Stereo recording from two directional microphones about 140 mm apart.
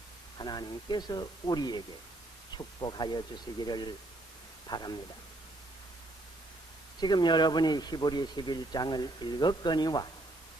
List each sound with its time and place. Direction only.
0.3 s speech: 30° left (ahead or behind)
2.8 s speech: 30° left (ahead or behind)
7.0 s speech: 30° left (ahead or behind)